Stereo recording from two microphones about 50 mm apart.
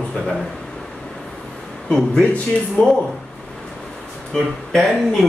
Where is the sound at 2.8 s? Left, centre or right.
Left.